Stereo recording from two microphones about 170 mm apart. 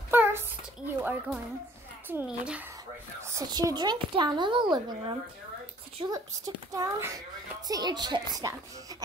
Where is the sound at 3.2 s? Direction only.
20° right (ahead or behind).